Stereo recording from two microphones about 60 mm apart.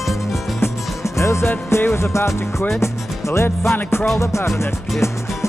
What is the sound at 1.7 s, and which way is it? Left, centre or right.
Speech, left.